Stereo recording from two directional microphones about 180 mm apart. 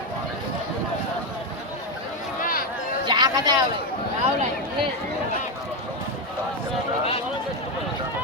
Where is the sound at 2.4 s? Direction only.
55° left (ahead or behind).